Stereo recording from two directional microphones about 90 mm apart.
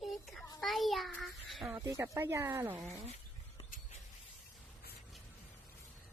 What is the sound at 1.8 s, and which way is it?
A woman's voice, 35° right (ahead or behind).